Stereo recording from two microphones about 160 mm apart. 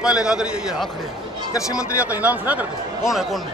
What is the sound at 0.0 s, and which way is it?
Speech, 5° right (ahead or behind).